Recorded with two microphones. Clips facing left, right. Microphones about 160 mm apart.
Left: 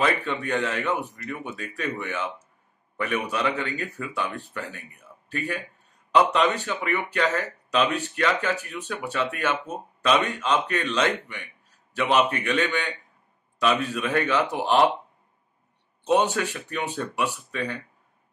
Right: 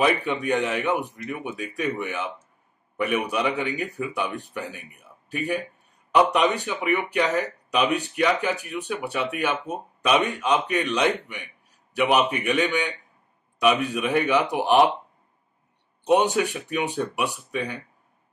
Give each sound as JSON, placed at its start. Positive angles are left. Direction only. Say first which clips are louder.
{"t": 0.0, "sound": "speech", "louder": "right 3 dB", "side_deg": -15}
{"t": 16.0, "sound": "speech", "louder": "right 2 dB", "side_deg": -15}